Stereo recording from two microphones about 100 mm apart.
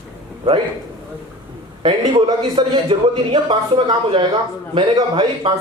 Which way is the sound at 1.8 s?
60° right (ahead or behind).